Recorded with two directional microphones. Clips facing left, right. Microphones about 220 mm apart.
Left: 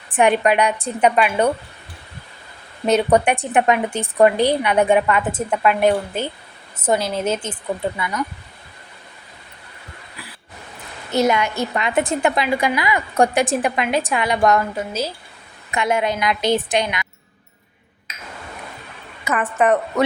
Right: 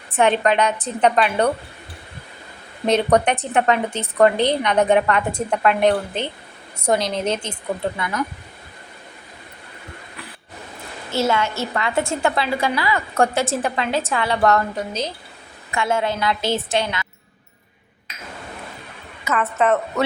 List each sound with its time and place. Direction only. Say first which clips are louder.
0.1 s a woman's voice: left 1 dB; 15° left (ahead or behind)
2.8 s a woman's voice: left 1 dB; 5° left (ahead or behind)
11.1 s a woman's voice: left 3 dB; 15° left (ahead or behind)
19.2 s a woman's voice: left 1 dB; 15° left (ahead or behind)